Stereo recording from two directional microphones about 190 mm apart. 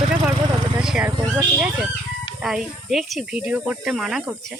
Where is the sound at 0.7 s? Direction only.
5° right (ahead or behind).